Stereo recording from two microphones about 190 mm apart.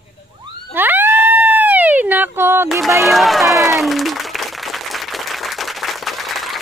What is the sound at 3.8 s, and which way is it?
Applause, centre (ahead or behind).